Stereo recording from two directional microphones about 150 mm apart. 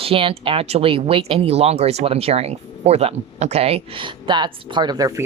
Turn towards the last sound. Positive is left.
turn(degrees=-25)  # may be behind; listen again after turning